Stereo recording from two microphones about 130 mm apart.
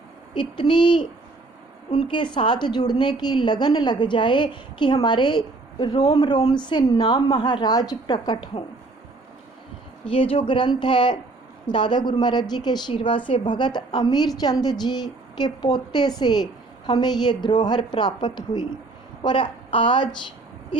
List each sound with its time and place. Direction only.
0.3 s a woman's voice: 35° left (ahead or behind)
10.1 s a woman's voice: 45° left (ahead or behind)